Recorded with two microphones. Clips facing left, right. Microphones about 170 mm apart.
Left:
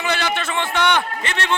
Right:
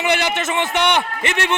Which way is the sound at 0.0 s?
15° right (ahead or behind).